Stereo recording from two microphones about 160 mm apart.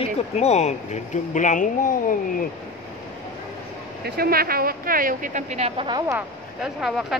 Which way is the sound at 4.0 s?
70° right (ahead or behind).